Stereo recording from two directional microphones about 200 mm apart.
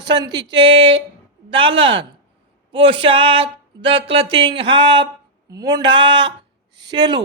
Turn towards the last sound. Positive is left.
turn(degrees=-20)  # may be behind; listen again after turning